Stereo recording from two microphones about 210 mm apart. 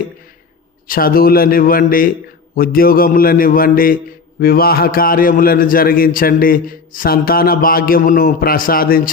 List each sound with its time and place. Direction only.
0.9 s a man's voice: 45° left (ahead or behind)